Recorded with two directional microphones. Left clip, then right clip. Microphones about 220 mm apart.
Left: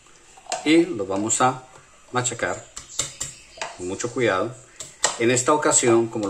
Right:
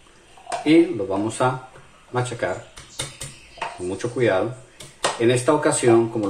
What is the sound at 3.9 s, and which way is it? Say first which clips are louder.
Speech: right 1 dB; 10° left (ahead or behind).